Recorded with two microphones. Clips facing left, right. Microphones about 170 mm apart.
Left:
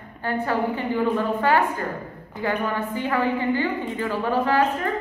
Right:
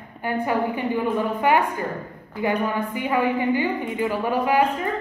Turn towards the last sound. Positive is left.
turn(degrees=-15)  # may be behind; listen again after turning